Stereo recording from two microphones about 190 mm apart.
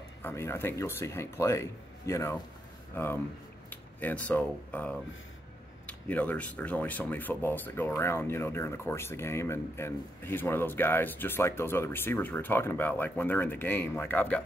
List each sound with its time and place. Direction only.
0.2 s speech: 10° left (ahead or behind)